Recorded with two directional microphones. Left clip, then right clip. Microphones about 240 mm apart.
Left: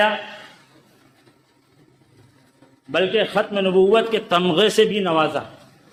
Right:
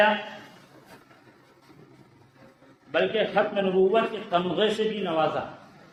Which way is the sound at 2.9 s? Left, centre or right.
Left.